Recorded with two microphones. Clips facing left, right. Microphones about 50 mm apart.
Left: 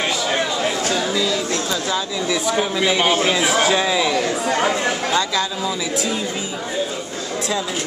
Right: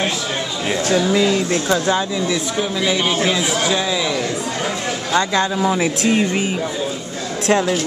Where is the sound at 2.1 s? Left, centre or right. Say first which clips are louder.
Even; centre.